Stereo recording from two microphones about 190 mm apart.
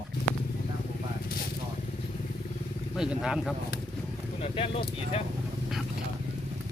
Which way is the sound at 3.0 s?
5° right (ahead or behind).